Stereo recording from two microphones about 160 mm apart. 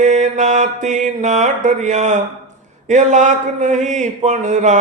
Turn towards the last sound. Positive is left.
turn(degrees=-50)  # may be behind; listen again after turning